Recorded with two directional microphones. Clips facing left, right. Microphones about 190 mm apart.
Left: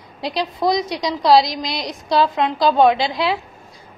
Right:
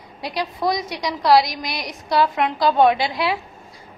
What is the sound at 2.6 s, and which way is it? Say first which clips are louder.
Speech: left 2 dB; 20° left (ahead or behind).